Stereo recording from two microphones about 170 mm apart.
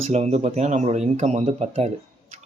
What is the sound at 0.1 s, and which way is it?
Speech, 40° right (ahead or behind).